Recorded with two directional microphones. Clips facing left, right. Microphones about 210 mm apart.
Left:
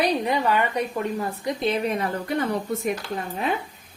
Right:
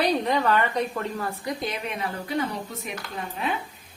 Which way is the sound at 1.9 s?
50° left (ahead or behind).